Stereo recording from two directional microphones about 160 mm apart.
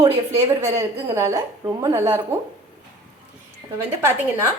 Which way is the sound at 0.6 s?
20° right (ahead or behind).